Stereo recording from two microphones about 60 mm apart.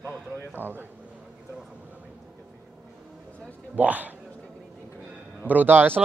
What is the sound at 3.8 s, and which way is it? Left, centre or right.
Speech, right.